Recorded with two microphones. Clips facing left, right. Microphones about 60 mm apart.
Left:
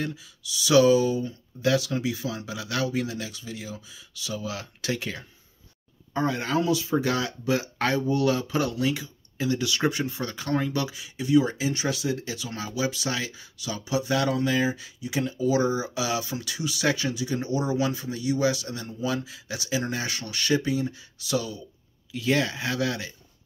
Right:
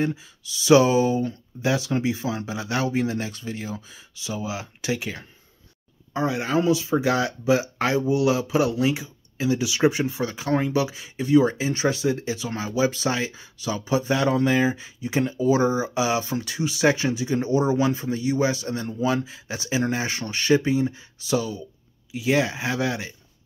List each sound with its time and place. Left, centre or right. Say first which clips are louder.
0.0 s speech: right 6 dB; right
4.1 s speech: right 3 dB; right
6.6 s speech: right 5 dB; right
11.0 s speech: right 2 dB; right